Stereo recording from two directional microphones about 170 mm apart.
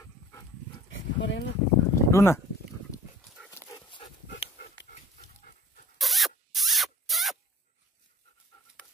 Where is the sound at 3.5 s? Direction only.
15° left (ahead or behind).